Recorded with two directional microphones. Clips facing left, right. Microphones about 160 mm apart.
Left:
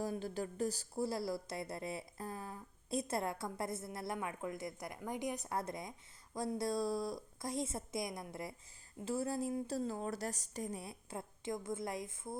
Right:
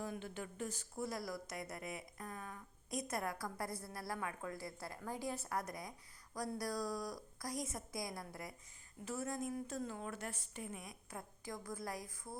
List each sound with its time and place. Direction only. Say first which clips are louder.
0.0 s a woman's voice: left 6 dB; 35° left (ahead or behind)